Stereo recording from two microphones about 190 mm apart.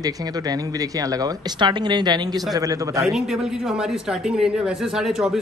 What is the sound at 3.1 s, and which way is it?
Speech, centre (ahead or behind).